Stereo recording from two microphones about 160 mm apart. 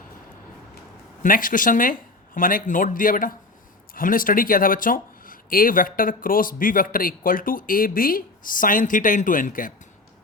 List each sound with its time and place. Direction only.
1.2 s speech: 60° left (ahead or behind)